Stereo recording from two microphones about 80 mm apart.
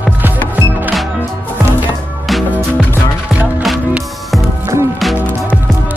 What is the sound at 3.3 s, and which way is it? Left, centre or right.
Music, right.